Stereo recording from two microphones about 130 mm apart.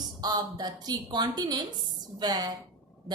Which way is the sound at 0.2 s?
30° right (ahead or behind).